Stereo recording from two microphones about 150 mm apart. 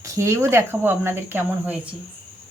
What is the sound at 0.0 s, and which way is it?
Speech, 20° right (ahead or behind).